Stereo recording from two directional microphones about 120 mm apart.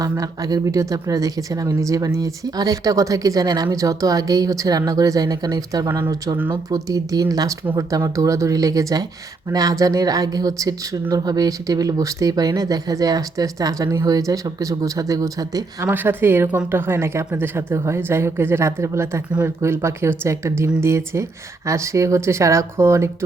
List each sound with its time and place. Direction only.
0.0 s speech: 30° right (ahead or behind)
15.9 s speech: 15° right (ahead or behind)